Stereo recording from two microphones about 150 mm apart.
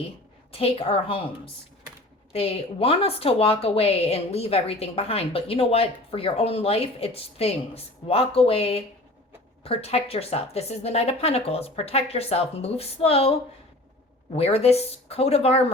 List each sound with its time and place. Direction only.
0.5 s a woman's voice: 40° left (ahead or behind)
2.3 s a woman's voice: 40° left (ahead or behind)